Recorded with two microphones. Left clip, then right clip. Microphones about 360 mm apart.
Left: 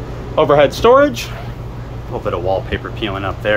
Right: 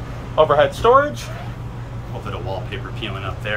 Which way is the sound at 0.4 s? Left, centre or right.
Left.